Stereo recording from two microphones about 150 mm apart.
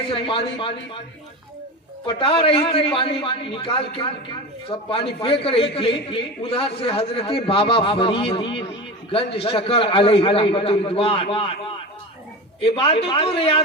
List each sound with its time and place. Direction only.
0.1 s a man's voice: 35° left (ahead or behind)
2.0 s a man's voice: 40° left (ahead or behind)
12.6 s a man's voice: 40° left (ahead or behind)